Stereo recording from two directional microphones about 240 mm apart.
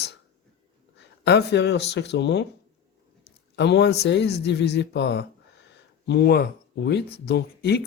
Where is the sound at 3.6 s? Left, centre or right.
Left.